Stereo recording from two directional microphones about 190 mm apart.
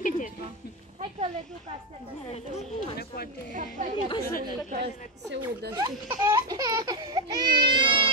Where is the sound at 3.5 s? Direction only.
40° right (ahead or behind).